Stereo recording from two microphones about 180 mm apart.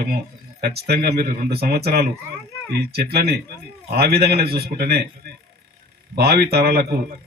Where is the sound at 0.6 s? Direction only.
60° right (ahead or behind).